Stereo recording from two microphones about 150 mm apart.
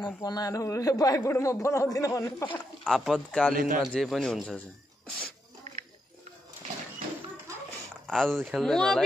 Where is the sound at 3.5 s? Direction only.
65° right (ahead or behind).